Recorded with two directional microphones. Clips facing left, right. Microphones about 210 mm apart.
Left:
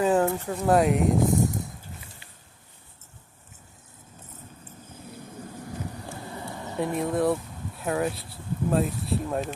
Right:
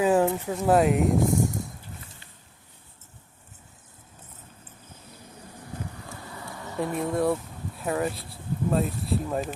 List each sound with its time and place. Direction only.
0.0 s speech: 5° right (ahead or behind)
6.1 s vehicle: 30° left (ahead or behind)
6.7 s speech: centre (ahead or behind)